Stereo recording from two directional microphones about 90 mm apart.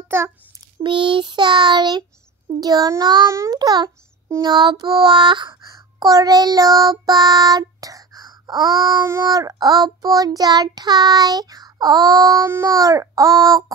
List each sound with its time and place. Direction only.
0.1 s a child's voice: 25° right (ahead or behind)
0.8 s child singing: 65° right (ahead or behind)
5.9 s child singing: 40° right (ahead or behind)
12.6 s speech: 40° right (ahead or behind)